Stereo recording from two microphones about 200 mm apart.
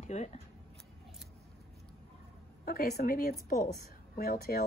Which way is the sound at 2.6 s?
45° left (ahead or behind).